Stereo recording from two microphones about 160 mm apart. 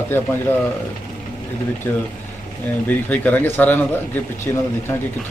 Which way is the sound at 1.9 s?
10° left (ahead or behind).